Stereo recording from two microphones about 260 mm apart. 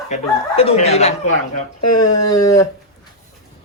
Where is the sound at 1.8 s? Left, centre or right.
Left.